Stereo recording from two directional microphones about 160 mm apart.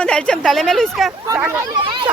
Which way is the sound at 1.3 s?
15° right (ahead or behind).